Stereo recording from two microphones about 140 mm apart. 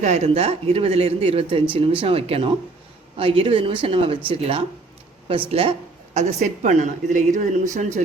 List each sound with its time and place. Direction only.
0.0 s speech: 55° right (ahead or behind)
6.1 s a woman's voice: 55° right (ahead or behind)